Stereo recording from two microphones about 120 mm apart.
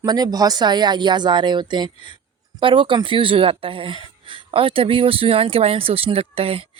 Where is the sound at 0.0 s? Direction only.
35° right (ahead or behind).